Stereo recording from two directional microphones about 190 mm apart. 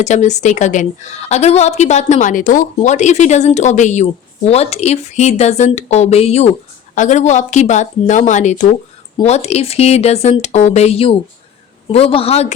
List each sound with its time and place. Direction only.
0.0 s a woman's voice: 40° left (ahead or behind)